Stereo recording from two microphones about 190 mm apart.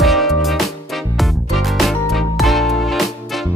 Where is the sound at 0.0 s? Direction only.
Centre (ahead or behind).